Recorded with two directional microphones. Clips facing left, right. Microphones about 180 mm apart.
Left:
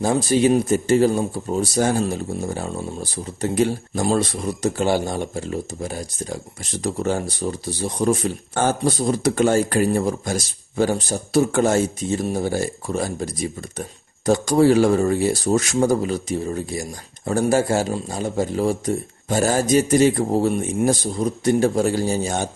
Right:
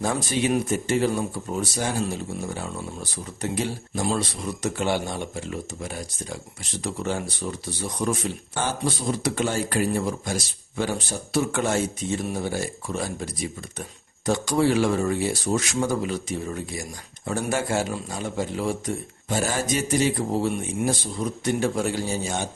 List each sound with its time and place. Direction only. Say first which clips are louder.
0.0 s speech: left 7 dB; 30° left (ahead or behind)
3.5 s speech: left 9 dB; 50° left (ahead or behind)
8.5 s speech: left 7 dB; 45° left (ahead or behind)